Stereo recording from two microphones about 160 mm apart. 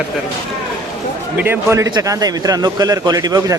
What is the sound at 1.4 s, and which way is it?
A man's voice, 15° right (ahead or behind).